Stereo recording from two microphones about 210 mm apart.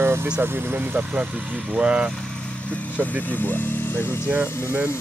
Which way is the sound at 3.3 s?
10° left (ahead or behind).